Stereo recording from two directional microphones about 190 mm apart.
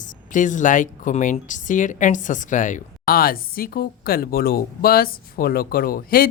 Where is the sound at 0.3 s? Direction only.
40° left (ahead or behind).